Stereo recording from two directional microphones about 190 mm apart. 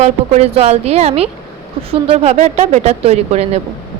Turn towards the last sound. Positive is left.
turn(degrees=-35)  # may be behind; listen again after turning